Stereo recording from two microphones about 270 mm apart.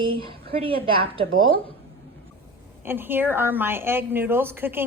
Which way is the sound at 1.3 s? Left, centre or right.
Right.